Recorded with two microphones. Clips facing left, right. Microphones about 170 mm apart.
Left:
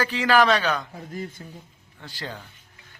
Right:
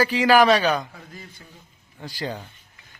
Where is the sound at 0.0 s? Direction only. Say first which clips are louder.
Right 3 dB; 10° right (ahead or behind).